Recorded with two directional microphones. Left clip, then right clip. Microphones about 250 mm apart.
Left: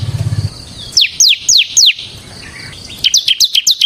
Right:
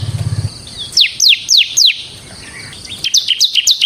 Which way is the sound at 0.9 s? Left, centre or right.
Centre.